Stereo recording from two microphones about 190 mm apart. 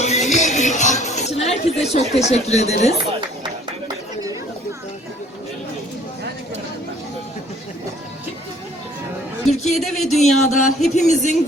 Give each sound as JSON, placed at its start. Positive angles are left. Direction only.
{"t": 0.0, "sound": "music", "side_deg": 35}
{"t": 9.7, "sound": "speech", "side_deg": 0}
{"t": 10.9, "sound": "speech", "side_deg": 40}